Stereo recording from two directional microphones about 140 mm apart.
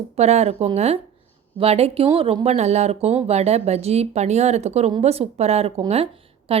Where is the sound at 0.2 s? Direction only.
50° right (ahead or behind).